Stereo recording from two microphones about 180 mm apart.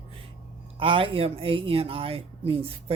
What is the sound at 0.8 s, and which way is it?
Speech, 30° right (ahead or behind).